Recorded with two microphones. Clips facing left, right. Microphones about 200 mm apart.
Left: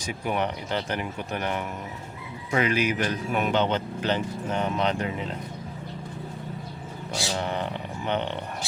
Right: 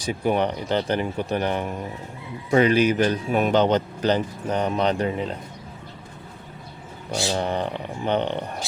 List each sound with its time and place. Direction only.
0.0 s speech: 35° right (ahead or behind)
7.1 s speech: 35° right (ahead or behind)